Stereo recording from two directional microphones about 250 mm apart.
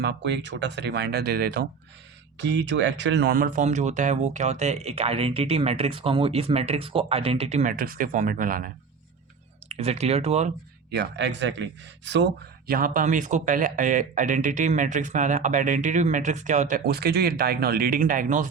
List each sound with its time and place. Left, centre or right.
0.0 s speech: right
10.9 s speech: right